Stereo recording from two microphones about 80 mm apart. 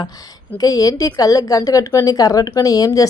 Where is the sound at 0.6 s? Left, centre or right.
Left.